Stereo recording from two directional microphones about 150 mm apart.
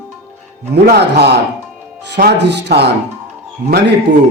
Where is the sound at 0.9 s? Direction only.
90° right.